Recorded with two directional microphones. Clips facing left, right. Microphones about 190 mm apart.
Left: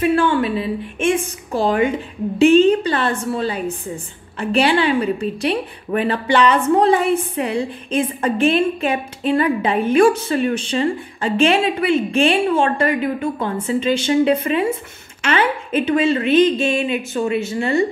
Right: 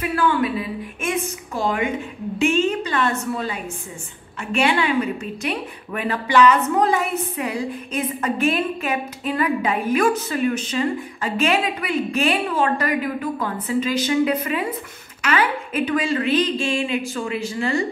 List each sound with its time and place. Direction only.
0.0 s a woman's voice: 30° left (ahead or behind)